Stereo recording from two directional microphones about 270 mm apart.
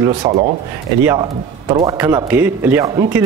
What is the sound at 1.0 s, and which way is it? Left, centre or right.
A man's voice, centre.